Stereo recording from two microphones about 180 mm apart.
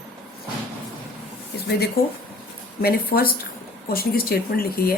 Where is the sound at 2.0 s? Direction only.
60° left (ahead or behind).